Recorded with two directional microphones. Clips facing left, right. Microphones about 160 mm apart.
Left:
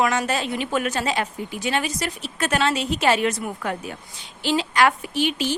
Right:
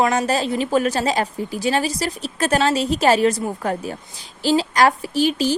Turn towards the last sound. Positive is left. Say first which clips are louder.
# right 5 dB
turn(degrees=-35)  # may be behind; listen again after turning